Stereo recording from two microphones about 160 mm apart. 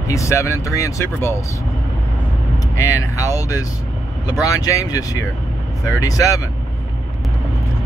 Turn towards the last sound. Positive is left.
turn(degrees=20)  # may be behind; listen again after turning